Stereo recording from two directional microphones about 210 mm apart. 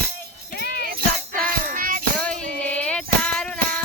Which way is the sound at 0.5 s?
45° left (ahead or behind).